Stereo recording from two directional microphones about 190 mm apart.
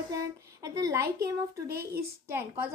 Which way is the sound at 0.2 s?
15° right (ahead or behind).